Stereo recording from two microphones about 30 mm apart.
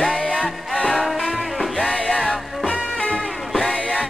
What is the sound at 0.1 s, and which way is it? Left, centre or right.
Music, left.